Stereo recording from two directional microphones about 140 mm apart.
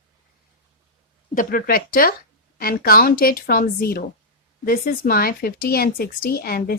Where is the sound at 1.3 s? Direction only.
90° left.